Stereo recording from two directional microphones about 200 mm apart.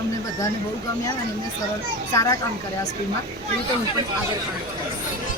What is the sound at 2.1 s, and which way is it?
Speech, 15° left (ahead or behind).